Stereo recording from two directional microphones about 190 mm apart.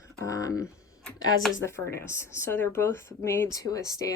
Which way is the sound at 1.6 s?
15° left (ahead or behind).